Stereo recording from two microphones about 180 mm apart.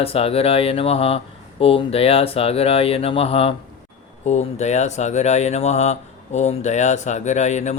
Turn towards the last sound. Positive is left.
turn(degrees=40)  # may be behind; listen again after turning